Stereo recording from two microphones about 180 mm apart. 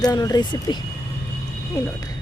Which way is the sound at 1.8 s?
20° left (ahead or behind).